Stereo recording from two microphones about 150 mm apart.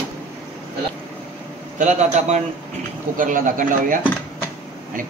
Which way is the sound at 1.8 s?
55° right (ahead or behind).